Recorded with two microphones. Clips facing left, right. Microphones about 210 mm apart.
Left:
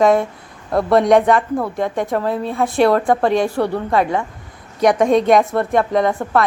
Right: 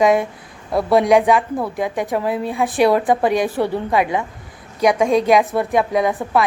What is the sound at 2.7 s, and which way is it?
Speech, 5° right (ahead or behind).